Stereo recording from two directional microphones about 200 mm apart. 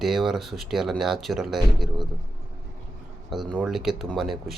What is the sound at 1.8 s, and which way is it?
Speech, 25° right (ahead or behind).